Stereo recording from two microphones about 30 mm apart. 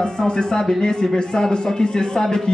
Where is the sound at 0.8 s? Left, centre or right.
Left.